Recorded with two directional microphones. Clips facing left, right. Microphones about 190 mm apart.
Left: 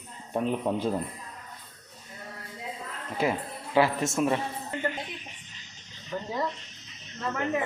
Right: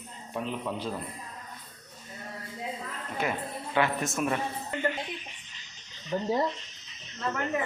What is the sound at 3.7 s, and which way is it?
Speech, 25° left (ahead or behind).